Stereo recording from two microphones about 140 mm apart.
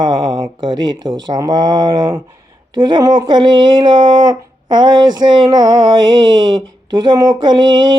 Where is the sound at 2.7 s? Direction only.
30° right (ahead or behind).